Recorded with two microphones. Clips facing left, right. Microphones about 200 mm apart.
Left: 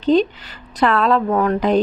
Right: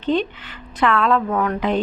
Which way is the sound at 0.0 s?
35° left (ahead or behind).